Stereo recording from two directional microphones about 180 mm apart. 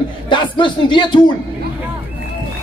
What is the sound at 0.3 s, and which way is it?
Speech, 25° left (ahead or behind).